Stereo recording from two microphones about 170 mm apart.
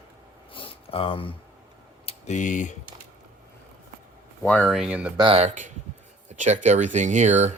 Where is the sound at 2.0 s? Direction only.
45° left (ahead or behind).